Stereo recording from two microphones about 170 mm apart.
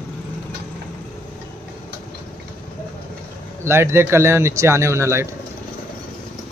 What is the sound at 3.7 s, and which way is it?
Speech, 15° right (ahead or behind).